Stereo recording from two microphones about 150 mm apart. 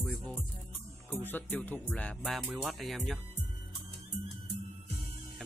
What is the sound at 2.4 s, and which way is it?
Speech, 5° right (ahead or behind).